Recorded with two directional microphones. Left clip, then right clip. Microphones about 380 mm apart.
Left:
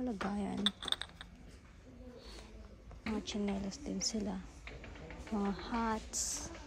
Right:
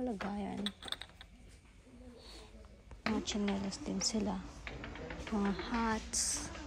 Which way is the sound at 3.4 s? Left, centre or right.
Centre.